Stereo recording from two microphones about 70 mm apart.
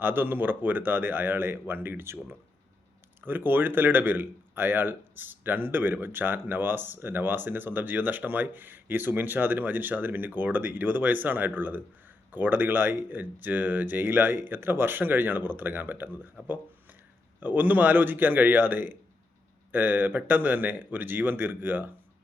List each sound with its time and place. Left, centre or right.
0.0 s speech: right
3.2 s speech: right